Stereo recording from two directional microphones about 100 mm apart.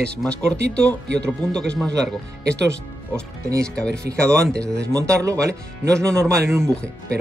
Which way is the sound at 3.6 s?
10° left (ahead or behind).